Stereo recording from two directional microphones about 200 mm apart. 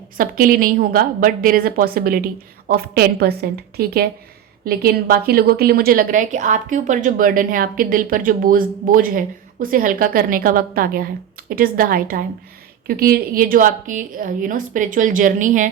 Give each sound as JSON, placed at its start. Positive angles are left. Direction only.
{"t": 0.2, "sound": "a woman's voice", "side_deg": -45}